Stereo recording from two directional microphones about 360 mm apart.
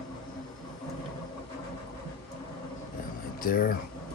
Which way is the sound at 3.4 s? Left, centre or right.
Left.